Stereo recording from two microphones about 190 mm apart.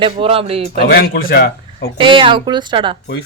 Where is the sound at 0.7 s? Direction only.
55° left (ahead or behind).